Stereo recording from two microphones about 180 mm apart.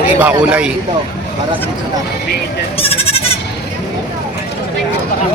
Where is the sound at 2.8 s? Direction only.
30° left (ahead or behind).